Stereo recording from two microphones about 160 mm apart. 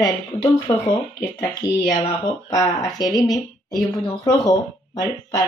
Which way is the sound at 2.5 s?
20° left (ahead or behind).